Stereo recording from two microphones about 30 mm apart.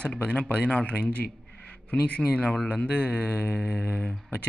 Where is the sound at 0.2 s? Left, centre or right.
Left.